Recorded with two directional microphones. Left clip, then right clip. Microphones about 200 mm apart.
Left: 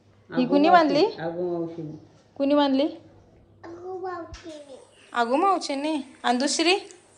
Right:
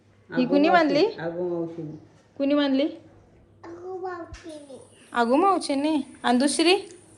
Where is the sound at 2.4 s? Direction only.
20° left (ahead or behind).